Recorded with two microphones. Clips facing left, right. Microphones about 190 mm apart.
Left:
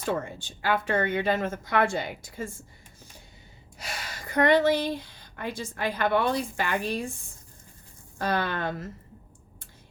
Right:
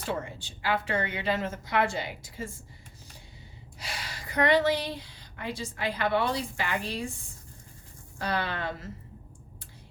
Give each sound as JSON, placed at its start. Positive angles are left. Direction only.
{"t": 0.1, "sound": "a woman's voice", "side_deg": 50}
{"t": 3.8, "sound": "speech", "side_deg": 50}
{"t": 8.2, "sound": "a woman's voice", "side_deg": 50}